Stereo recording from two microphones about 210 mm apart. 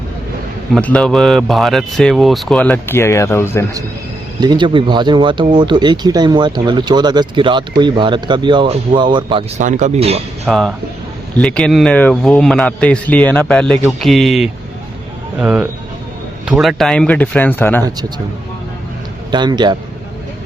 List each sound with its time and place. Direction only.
0.7 s a man's voice: 5° left (ahead or behind)
4.4 s speech: 20° right (ahead or behind)
9.6 s speech: 35° right (ahead or behind)
10.4 s a man's voice: centre (ahead or behind)
19.3 s speech: 20° right (ahead or behind)